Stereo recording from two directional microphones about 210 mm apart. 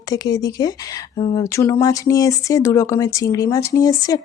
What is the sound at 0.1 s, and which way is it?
Speech, 20° left (ahead or behind).